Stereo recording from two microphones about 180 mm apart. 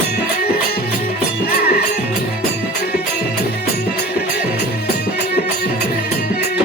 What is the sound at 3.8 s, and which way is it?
Music, 60° left (ahead or behind).